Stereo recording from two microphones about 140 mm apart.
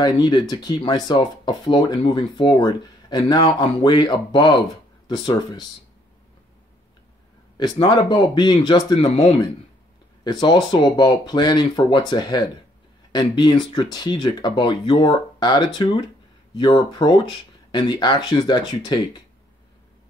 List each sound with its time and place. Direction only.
0.0 s speech: 35° left (ahead or behind)
7.5 s speech: 30° left (ahead or behind)
8.9 s speech: 45° left (ahead or behind)
10.2 s speech: 30° left (ahead or behind)